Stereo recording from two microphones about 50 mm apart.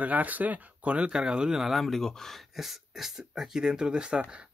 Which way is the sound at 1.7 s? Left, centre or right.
Centre.